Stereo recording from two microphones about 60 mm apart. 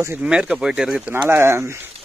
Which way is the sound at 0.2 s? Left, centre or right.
Centre.